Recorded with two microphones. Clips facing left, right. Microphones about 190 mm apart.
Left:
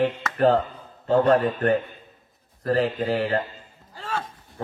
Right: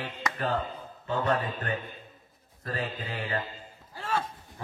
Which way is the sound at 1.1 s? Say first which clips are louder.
Left 10 dB; 65° left (ahead or behind).